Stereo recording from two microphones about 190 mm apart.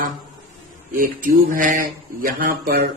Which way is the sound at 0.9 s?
45° right (ahead or behind).